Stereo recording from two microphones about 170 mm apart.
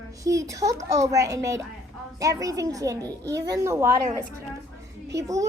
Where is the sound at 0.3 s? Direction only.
20° right (ahead or behind).